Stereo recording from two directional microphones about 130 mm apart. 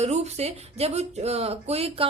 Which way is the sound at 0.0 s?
55° right (ahead or behind).